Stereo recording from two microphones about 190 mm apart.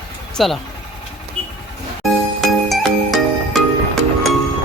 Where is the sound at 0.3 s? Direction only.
Centre (ahead or behind).